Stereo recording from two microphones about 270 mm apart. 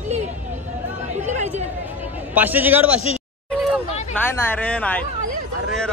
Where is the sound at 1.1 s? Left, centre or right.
Right.